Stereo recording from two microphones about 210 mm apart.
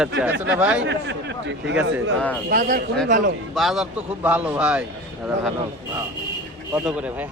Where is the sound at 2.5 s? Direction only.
40° right (ahead or behind).